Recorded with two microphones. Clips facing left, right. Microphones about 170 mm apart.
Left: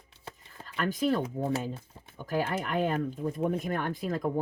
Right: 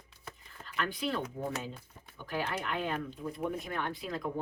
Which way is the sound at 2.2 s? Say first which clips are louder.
Left 5 dB; 45° left (ahead or behind).